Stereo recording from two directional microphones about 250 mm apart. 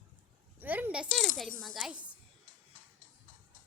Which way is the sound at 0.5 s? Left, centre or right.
Centre.